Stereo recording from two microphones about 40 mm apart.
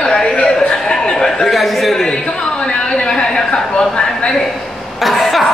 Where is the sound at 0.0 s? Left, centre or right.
Left.